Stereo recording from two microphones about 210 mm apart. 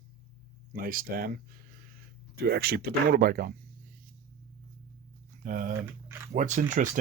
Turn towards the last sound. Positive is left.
turn(degrees=-35)  # may be behind; listen again after turning